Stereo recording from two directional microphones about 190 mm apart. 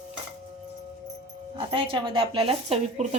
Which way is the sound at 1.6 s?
30° right (ahead or behind).